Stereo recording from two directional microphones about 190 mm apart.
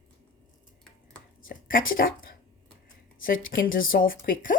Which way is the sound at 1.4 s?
45° left (ahead or behind).